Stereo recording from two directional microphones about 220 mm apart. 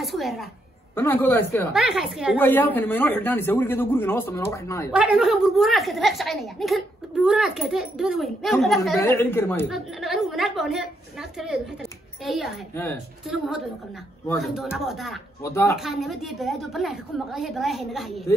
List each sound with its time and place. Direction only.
0.0 s a woman's voice: centre (ahead or behind)
1.7 s a woman's voice: centre (ahead or behind)
2.3 s speech: 10° left (ahead or behind)
4.9 s a woman's voice: 5° right (ahead or behind)
9.0 s speech: 10° left (ahead or behind)
9.7 s a woman's voice: centre (ahead or behind)
14.4 s a woman's voice: centre (ahead or behind)